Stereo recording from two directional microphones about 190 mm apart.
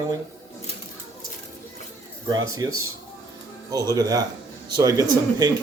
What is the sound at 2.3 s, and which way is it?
Speech, 15° right (ahead or behind).